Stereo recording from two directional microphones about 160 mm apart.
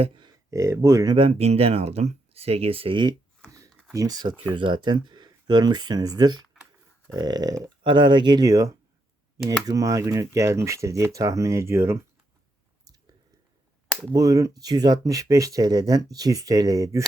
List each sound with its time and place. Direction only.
0.5 s speech: 20° right (ahead or behind)
1.1 s speech: 35° right (ahead or behind); by 12.0 s 15° right (ahead or behind)
14.1 s speech: 20° right (ahead or behind)